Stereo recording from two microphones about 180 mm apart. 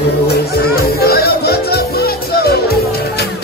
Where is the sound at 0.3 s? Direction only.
60° left (ahead or behind).